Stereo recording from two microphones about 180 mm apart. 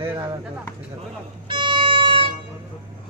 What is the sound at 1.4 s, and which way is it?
Music, 25° right (ahead or behind).